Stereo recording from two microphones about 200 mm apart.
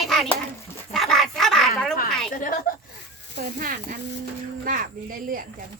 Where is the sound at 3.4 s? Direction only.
45° right (ahead or behind).